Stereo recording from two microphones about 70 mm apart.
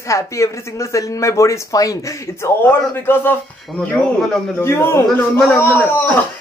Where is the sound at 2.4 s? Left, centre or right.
Left.